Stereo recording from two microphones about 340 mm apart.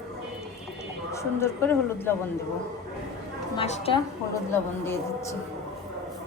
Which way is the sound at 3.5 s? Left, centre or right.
Centre.